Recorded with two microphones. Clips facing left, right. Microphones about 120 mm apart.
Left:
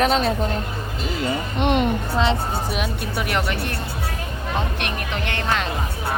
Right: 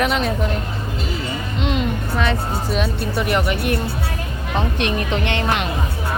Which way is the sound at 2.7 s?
5° left (ahead or behind).